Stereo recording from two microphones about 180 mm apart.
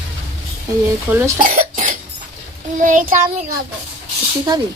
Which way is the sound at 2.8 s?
45° right (ahead or behind).